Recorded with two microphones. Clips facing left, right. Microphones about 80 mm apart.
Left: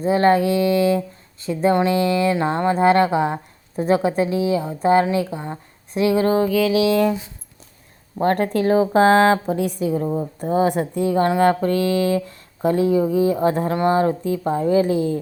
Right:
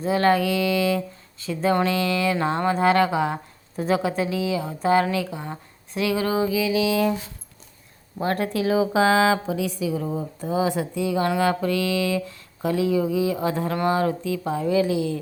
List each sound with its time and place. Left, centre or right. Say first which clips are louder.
0.0 s a woman's voice: left 4 dB; left
6.4 s music: left 4 dB; left
8.2 s a woman's voice: left 5 dB; left